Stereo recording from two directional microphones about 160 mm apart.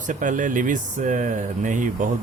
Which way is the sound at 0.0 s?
55° right (ahead or behind).